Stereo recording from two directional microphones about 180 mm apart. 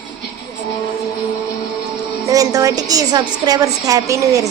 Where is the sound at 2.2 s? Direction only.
20° right (ahead or behind).